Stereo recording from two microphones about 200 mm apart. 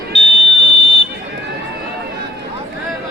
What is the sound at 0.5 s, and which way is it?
Buzzer, 30° left (ahead or behind).